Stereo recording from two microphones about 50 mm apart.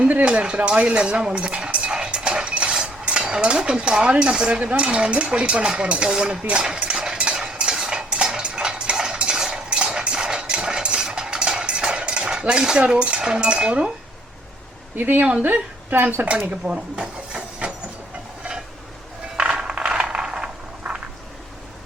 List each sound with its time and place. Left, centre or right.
0.0 s speech: right
0.3 s speech: centre
7.0 s cutlery: centre
12.9 s speech: centre
14.9 s speech: right
16.6 s speech: right
19.4 s mechanisms: centre
20.9 s a sound: centre